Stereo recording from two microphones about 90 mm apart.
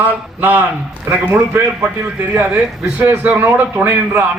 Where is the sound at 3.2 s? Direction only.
20° right (ahead or behind).